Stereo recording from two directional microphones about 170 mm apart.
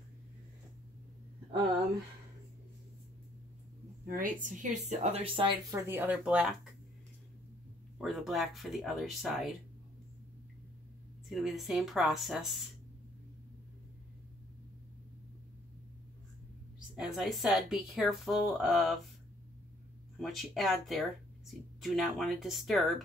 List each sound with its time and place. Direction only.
4.1 s speech: 50° right (ahead or behind); by 5.5 s 35° right (ahead or behind)
5.7 s speech: 15° right (ahead or behind)
8.0 s speech: centre (ahead or behind)
11.2 s speech: centre (ahead or behind)
16.9 s speech: 5° right (ahead or behind)
20.2 s speech: centre (ahead or behind)